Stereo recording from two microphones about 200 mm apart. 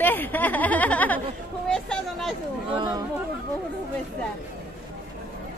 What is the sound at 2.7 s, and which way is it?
Speech, 20° right (ahead or behind).